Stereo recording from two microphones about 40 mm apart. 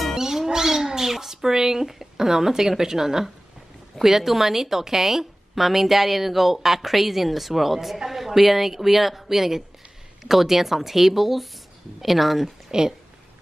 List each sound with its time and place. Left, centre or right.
0.2 s cat: centre
4.0 s a woman's voice: centre
12.7 s a woman's voice: centre